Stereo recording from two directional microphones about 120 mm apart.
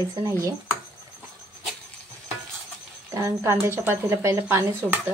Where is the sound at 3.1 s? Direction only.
25° right (ahead or behind).